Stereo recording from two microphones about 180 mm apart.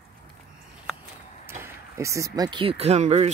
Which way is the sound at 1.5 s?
15° right (ahead or behind).